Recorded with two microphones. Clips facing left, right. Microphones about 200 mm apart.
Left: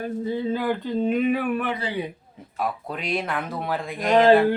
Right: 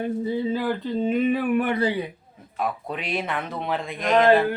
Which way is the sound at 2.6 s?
Centre (ahead or behind).